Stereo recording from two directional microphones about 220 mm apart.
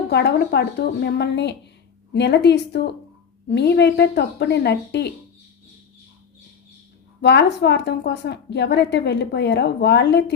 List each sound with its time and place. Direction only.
0.1 s speech: 50° left (ahead or behind)
7.2 s speech: 50° left (ahead or behind)